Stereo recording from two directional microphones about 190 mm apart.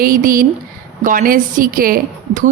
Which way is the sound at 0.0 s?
50° right (ahead or behind).